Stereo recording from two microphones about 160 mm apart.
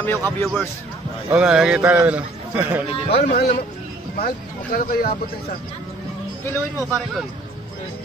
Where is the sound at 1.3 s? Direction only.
5° right (ahead or behind).